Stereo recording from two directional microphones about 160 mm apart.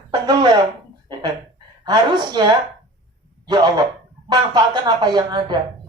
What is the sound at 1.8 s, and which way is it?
A man's voice, 25° right (ahead or behind).